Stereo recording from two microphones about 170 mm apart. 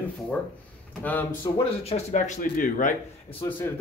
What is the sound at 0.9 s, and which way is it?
Speech, 10° left (ahead or behind).